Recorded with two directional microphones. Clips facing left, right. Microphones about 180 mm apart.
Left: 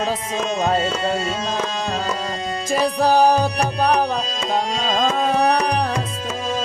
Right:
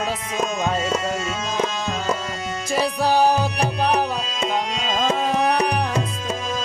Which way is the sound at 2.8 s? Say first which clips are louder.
Left 3 dB; 45° left (ahead or behind).